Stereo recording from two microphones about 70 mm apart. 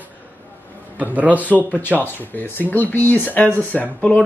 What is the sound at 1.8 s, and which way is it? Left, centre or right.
Speech, left.